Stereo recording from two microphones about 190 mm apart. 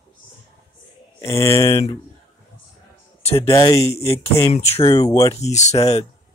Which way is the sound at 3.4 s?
15° left (ahead or behind).